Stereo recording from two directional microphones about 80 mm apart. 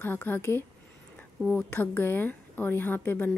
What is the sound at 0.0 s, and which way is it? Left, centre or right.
Speech, left.